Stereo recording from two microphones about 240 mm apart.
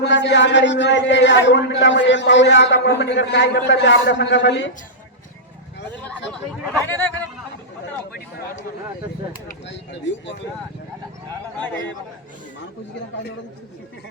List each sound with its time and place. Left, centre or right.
0.0 s a man's voice: left
6.6 s speech: centre
9.5 s a man's voice: left